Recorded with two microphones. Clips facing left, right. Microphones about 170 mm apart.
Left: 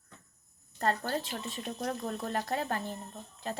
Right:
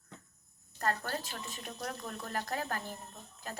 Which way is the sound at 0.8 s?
30° left (ahead or behind).